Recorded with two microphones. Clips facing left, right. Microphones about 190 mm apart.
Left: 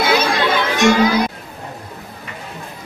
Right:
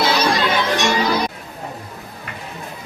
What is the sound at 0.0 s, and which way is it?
Music, 55° left (ahead or behind).